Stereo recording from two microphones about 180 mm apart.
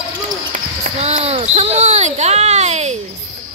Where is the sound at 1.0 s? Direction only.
35° right (ahead or behind).